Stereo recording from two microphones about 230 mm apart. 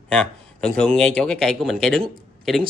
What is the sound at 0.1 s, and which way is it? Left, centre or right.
Speech, centre.